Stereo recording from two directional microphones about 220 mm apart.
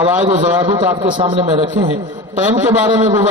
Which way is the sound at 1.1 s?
30° right (ahead or behind).